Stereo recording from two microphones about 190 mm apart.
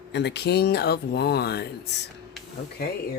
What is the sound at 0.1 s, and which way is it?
Speech, 65° left (ahead or behind).